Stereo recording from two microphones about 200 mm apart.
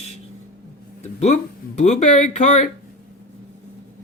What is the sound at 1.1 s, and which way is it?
Speech, 35° left (ahead or behind).